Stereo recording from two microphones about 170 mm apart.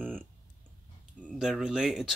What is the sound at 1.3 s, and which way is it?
Speech, 5° right (ahead or behind).